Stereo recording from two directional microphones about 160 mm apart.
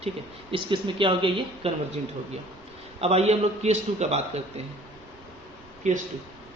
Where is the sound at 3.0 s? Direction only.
40° right (ahead or behind).